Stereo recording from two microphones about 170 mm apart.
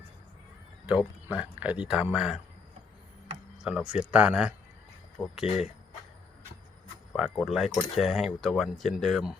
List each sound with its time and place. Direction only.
0.9 s speech: 5° right (ahead or behind)
3.6 s speech: 5° right (ahead or behind)
5.2 s speech: 10° left (ahead or behind)
7.1 s speech: 5° left (ahead or behind)